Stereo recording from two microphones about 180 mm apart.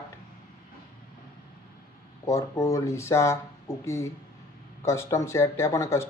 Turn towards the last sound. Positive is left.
turn(degrees=15)  # may be behind; listen again after turning